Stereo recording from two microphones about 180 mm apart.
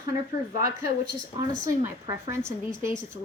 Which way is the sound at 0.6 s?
55° right (ahead or behind).